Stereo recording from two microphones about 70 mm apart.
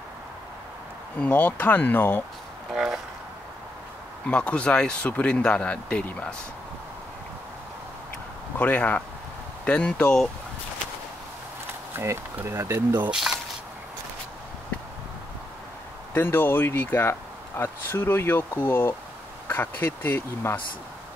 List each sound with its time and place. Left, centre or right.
1.2 s speech: left
2.7 s speech: centre
4.3 s speech: centre
8.5 s speech: left
12.4 s speech: right
13.1 s speech: centre
16.2 s speech: left